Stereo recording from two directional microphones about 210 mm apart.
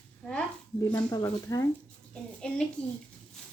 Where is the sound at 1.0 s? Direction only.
15° left (ahead or behind).